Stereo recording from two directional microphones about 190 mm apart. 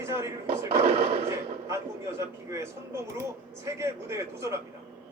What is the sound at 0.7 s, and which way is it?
Speech, 30° right (ahead or behind).